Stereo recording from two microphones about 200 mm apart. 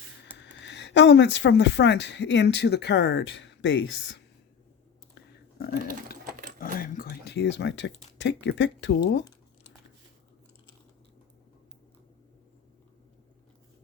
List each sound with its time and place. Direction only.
0.5 s speech: 60° left (ahead or behind)
5.1 s a sound: 50° left (ahead or behind)
6.6 s dog: 45° left (ahead or behind); by 7.9 s 60° left (ahead or behind)
8.2 s speech: 60° left (ahead or behind)